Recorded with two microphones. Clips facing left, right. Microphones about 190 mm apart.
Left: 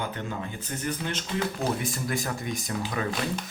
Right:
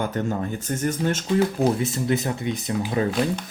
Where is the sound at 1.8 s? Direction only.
25° right (ahead or behind).